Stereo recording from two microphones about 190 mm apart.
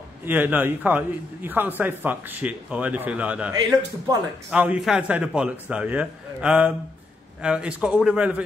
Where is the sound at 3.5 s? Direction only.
20° right (ahead or behind).